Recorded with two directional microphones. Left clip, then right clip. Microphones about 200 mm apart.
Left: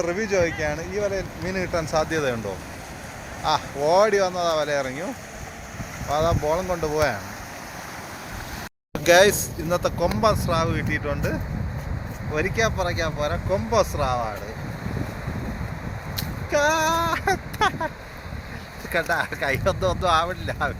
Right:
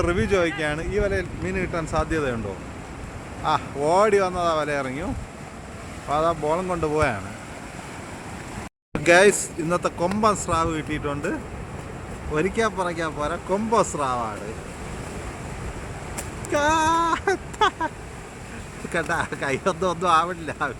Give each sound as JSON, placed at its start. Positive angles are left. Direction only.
{"t": 0.0, "sound": "speech", "side_deg": -20}
{"t": 1.5, "sound": "speech", "side_deg": 5}
{"t": 3.4, "sound": "speech", "side_deg": 5}
{"t": 6.1, "sound": "speech", "side_deg": 5}
{"t": 8.9, "sound": "speech", "side_deg": 0}
{"t": 16.5, "sound": "speech", "side_deg": 0}
{"t": 18.9, "sound": "speech", "side_deg": 5}